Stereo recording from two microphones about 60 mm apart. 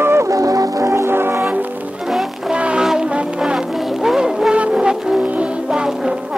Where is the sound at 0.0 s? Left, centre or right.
Right.